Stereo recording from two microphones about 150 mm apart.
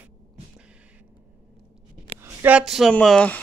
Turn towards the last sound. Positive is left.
turn(degrees=5)  # may be behind; listen again after turning